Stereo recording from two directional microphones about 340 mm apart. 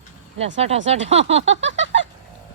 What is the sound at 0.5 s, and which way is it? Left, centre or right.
Speech, centre.